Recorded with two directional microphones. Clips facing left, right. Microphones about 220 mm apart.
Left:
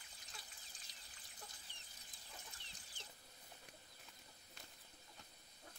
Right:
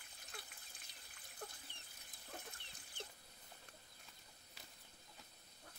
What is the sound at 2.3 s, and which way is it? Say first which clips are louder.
Vehicle: right 7 dB; 60° right (ahead or behind).